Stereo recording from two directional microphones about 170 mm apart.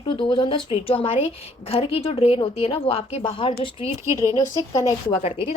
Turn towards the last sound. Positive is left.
turn(degrees=35)  # may be behind; listen again after turning